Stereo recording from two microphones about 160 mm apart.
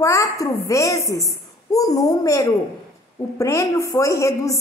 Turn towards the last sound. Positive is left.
turn(degrees=20)  # may be behind; listen again after turning